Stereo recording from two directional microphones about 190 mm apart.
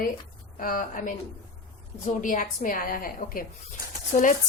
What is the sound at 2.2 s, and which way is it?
A woman's voice, 45° left (ahead or behind).